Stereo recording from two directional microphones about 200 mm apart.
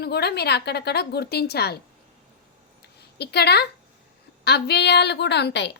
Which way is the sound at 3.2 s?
55° left (ahead or behind).